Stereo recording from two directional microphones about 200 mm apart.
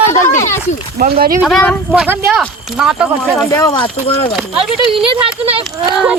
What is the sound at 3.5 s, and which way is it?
Speech, 20° left (ahead or behind).